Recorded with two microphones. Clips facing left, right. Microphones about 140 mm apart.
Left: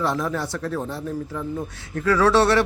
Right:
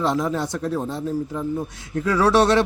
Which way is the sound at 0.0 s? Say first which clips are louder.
Right 2 dB; 20° right (ahead or behind).